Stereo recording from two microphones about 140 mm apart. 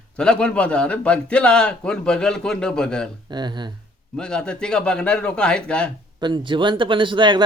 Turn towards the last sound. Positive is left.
turn(degrees=-35)  # may be behind; listen again after turning